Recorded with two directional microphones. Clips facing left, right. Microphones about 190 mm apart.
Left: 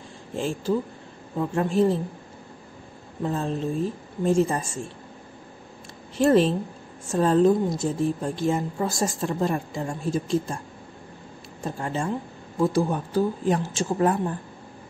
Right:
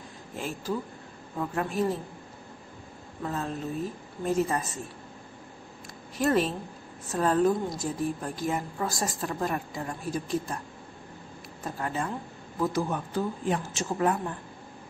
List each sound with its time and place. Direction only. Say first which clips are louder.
0.4 s a woman's voice: left 7 dB; 30° left (ahead or behind)
3.2 s a woman's voice: left 6 dB; 30° left (ahead or behind)
6.1 s a woman's voice: left 6 dB; 25° left (ahead or behind)
11.6 s a woman's voice: left 4 dB; 25° left (ahead or behind)